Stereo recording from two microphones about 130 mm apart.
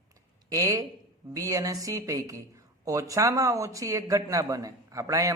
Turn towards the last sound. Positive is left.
turn(degrees=-25)  # may be behind; listen again after turning